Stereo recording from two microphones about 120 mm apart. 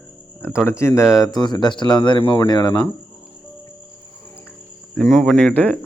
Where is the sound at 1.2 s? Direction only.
35° left (ahead or behind).